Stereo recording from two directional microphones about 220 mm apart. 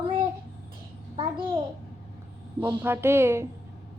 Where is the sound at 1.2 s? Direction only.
25° right (ahead or behind).